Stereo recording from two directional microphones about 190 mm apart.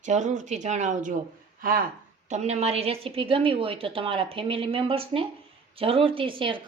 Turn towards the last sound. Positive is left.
turn(degrees=-25)  # may be behind; listen again after turning